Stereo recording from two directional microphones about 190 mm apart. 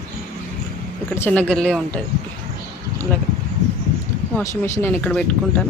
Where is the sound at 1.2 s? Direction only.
10° left (ahead or behind).